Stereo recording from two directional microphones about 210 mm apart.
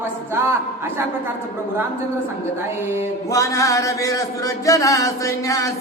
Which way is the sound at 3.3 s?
15° left (ahead or behind).